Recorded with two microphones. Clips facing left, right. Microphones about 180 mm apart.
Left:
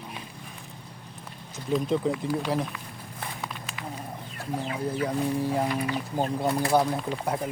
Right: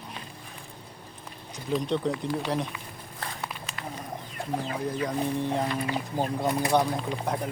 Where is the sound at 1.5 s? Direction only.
5° left (ahead or behind).